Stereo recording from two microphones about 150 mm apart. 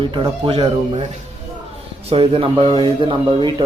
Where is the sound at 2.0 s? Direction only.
40° right (ahead or behind).